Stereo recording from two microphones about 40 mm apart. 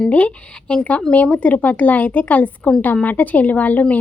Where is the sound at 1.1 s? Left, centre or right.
Left.